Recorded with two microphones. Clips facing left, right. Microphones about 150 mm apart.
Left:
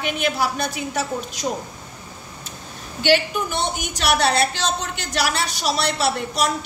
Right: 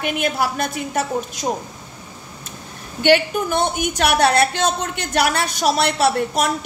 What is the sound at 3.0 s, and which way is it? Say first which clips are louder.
A woman's voice: right 3 dB; 50° right (ahead or behind).